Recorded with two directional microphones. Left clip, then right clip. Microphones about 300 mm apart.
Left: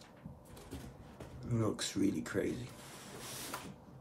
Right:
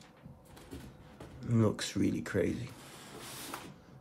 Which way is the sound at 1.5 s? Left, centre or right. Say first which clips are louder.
Right 4 dB; right.